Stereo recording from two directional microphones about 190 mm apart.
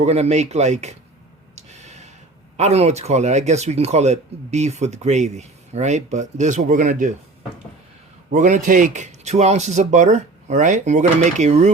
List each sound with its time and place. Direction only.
0.0 s speech: 35° right (ahead or behind)
1.5 s a sound: 35° right (ahead or behind)
2.6 s speech: 35° right (ahead or behind)
8.3 s speech: 40° right (ahead or behind)